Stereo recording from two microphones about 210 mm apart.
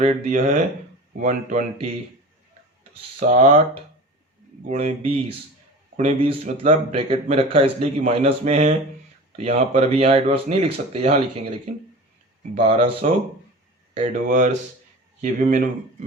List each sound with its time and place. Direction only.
0.0 s speech: 35° right (ahead or behind)
3.2 s speech: 30° right (ahead or behind)